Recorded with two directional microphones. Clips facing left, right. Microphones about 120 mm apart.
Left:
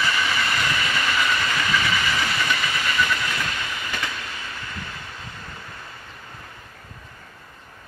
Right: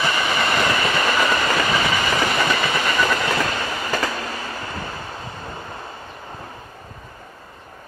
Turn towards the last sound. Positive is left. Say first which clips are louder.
# right 7 dB
turn(degrees=-35)  # may be behind; listen again after turning